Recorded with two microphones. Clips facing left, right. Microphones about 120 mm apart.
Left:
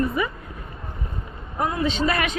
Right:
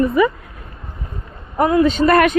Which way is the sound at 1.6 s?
75° right (ahead or behind).